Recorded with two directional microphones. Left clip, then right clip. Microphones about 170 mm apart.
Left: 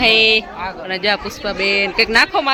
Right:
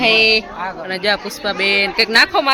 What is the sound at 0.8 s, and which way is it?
Speech, centre (ahead or behind).